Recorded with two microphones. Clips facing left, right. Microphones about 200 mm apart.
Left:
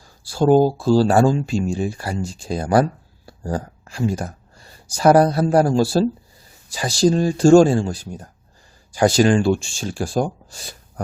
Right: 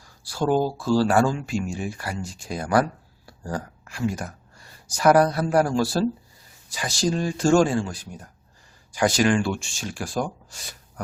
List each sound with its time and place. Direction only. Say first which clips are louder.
0.0 s speech: left 7 dB; 30° left (ahead or behind)